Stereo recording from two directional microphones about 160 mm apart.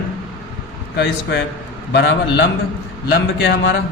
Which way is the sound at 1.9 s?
90° left.